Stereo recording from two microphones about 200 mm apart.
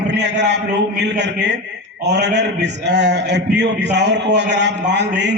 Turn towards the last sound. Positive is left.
turn(degrees=-60)  # may be behind; listen again after turning